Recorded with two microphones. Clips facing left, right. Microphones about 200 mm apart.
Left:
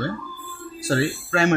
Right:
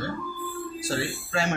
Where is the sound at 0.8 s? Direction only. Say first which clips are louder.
Left 9 dB; 60° left (ahead or behind).